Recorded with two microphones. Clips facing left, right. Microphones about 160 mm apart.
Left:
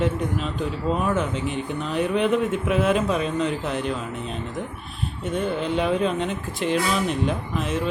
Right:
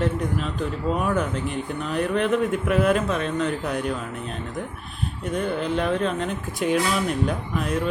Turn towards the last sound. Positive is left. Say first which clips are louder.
# even
turn(degrees=0)  # may be behind; listen again after turning